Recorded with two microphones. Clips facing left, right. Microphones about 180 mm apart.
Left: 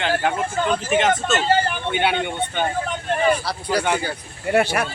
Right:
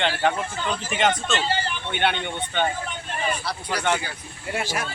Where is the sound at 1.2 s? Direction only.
45° left (ahead or behind).